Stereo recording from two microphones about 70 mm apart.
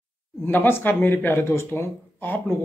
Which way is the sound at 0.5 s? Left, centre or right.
Left.